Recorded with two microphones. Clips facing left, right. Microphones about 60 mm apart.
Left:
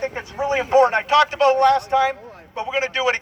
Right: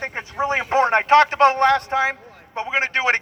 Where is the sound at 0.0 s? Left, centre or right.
Right.